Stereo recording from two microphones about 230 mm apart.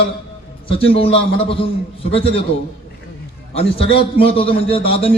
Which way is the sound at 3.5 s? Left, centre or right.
Left.